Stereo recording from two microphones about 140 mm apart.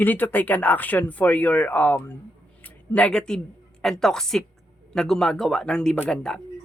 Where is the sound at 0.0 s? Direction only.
15° left (ahead or behind).